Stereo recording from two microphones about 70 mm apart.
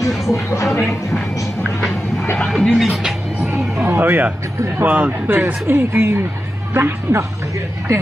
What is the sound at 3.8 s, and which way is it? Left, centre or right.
Speech, right.